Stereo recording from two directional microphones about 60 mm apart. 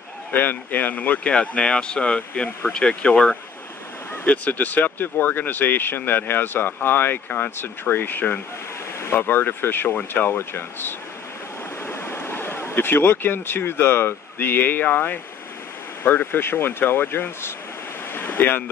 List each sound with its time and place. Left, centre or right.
0.3 s speech: left
4.3 s speech: left